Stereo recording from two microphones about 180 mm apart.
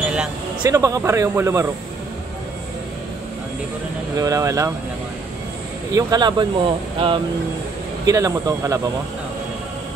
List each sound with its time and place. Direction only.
0.0 s a sound: 5° right (ahead or behind)
0.7 s speech: 15° right (ahead or behind)
4.2 s speech: 20° right (ahead or behind)
5.9 s speech: 20° right (ahead or behind)